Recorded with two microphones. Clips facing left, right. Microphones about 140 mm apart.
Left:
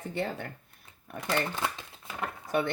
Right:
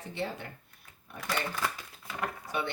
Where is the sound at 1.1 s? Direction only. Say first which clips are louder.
Left 3 dB; 25° left (ahead or behind).